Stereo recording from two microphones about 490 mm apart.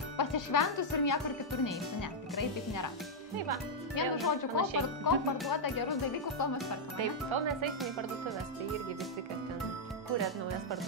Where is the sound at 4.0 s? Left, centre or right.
Left.